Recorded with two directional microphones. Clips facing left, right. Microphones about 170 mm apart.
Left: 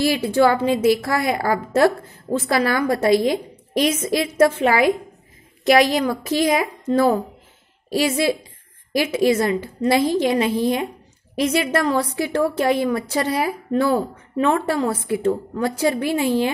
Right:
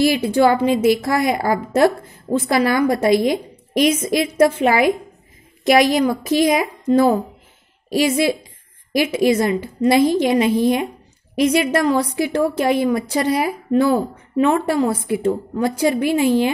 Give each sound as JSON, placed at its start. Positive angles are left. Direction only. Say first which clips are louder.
{"t": 0.0, "sound": "a woman's voice", "louder": "right 2 dB", "side_deg": -15}